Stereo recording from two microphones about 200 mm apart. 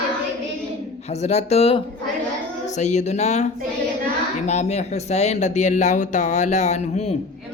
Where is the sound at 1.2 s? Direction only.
35° left (ahead or behind).